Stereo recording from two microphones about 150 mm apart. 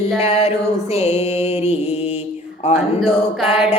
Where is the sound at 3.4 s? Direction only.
45° left (ahead or behind).